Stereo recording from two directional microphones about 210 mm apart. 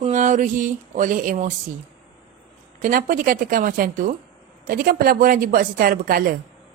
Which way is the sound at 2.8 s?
40° right (ahead or behind).